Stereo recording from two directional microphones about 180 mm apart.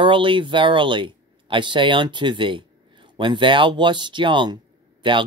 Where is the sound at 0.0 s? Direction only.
30° right (ahead or behind).